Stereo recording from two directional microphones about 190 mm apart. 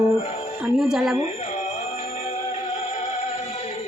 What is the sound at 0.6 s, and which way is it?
Speech, 5° right (ahead or behind).